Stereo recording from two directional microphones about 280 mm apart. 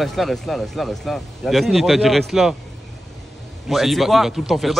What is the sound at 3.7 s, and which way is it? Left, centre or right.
Speech, centre.